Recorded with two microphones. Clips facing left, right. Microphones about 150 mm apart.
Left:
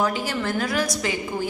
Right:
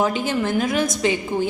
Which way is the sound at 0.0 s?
20° right (ahead or behind).